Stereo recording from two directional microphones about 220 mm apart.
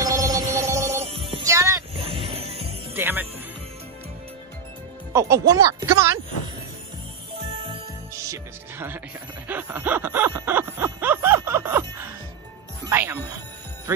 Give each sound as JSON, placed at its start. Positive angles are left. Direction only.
{"t": 0.0, "sound": "music", "side_deg": -15}
{"t": 1.0, "sound": "music", "side_deg": -25}
{"t": 1.5, "sound": "music", "side_deg": -15}
{"t": 2.0, "sound": "music", "side_deg": -25}
{"t": 2.9, "sound": "music", "side_deg": -10}
{"t": 5.1, "sound": "speech", "side_deg": -10}
{"t": 8.2, "sound": "music", "side_deg": -10}
{"t": 9.5, "sound": "snicker", "side_deg": -10}
{"t": 12.8, "sound": "music", "side_deg": -10}
{"t": 13.9, "sound": "speech", "side_deg": -10}